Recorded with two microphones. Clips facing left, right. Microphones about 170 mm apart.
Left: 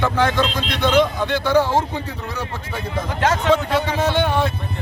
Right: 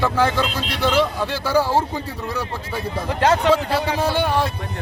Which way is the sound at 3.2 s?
35° right (ahead or behind).